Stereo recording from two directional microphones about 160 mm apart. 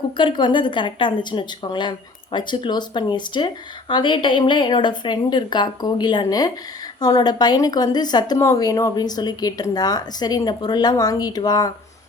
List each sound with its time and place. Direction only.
0.2 s a woman's voice: 30° left (ahead or behind)